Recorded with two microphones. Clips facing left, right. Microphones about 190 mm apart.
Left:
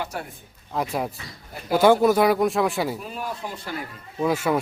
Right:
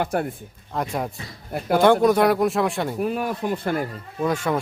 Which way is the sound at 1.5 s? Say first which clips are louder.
Right 2 dB; 55° right (ahead or behind).